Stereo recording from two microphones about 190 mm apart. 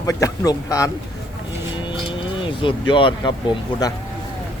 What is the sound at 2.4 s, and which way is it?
Speech, 25° left (ahead or behind).